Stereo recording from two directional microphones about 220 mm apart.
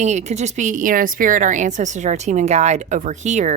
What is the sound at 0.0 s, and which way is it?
Speech, 30° right (ahead or behind).